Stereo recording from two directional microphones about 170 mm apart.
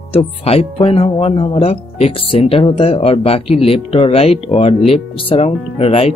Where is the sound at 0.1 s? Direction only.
35° left (ahead or behind).